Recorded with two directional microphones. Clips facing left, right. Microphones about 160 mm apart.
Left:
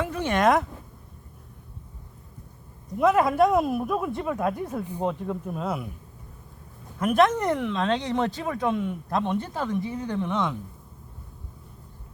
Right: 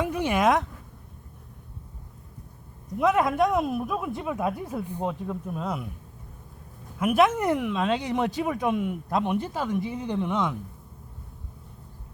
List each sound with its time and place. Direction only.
0.0 s a sound: 15° right (ahead or behind)
3.0 s speech: centre (ahead or behind)
7.0 s speech: 10° right (ahead or behind)